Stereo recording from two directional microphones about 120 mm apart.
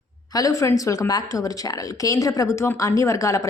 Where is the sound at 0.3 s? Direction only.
30° left (ahead or behind).